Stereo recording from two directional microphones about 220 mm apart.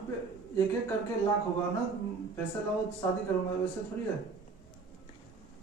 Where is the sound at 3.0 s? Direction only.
10° left (ahead or behind).